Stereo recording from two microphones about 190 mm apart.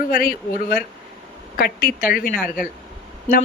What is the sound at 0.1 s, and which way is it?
Speech, 50° left (ahead or behind).